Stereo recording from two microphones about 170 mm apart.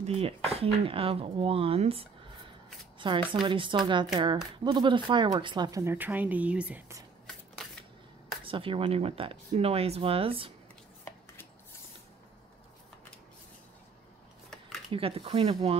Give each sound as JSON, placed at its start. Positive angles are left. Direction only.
{"t": 0.0, "sound": "speech", "side_deg": -35}
{"t": 8.5, "sound": "speech", "side_deg": -30}
{"t": 14.9, "sound": "speech", "side_deg": -35}